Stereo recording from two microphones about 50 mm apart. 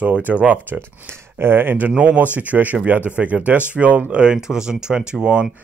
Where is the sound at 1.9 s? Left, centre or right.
Right.